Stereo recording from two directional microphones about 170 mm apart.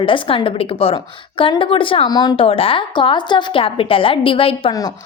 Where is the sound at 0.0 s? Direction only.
30° left (ahead or behind).